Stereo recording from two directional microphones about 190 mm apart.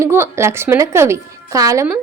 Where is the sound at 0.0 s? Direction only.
15° right (ahead or behind).